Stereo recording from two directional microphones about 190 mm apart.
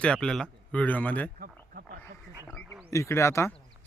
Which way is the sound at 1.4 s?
50° right (ahead or behind).